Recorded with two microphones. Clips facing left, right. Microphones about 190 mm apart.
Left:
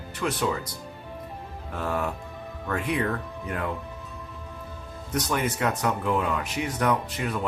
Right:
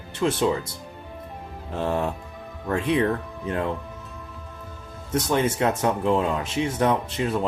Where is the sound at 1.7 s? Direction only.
25° right (ahead or behind).